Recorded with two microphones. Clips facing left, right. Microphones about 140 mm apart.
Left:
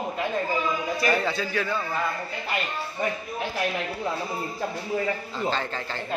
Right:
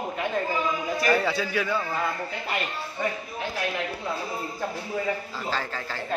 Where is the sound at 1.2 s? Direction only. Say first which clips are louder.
Right 1 dB; 10° right (ahead or behind).